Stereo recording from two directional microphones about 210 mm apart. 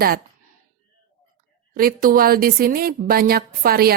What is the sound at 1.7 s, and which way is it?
Speech, 45° right (ahead or behind).